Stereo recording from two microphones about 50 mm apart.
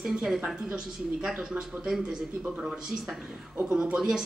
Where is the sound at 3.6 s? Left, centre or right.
Centre.